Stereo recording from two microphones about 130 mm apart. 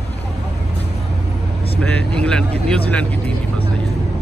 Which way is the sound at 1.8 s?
10° left (ahead or behind).